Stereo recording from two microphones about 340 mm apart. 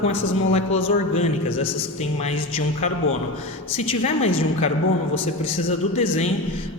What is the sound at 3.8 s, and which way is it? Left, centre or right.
Speech, centre.